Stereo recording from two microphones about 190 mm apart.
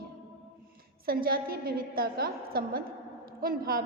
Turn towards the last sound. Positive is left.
turn(degrees=-50)  # may be behind; listen again after turning